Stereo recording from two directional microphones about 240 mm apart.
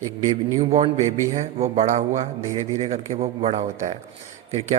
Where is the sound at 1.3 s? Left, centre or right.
Right.